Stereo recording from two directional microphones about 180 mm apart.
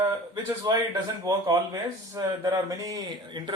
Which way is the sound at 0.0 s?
20° right (ahead or behind).